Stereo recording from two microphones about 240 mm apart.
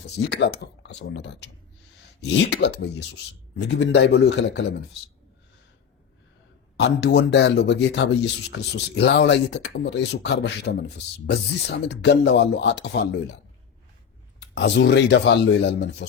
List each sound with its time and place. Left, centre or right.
0.3 s speech: left
6.7 s speech: left
14.4 s speech: left